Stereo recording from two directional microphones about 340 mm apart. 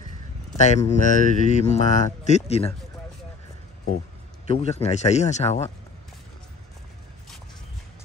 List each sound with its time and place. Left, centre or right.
0.6 s speech: centre
4.5 s speech: centre